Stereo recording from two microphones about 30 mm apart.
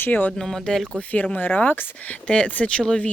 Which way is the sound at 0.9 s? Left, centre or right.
Left.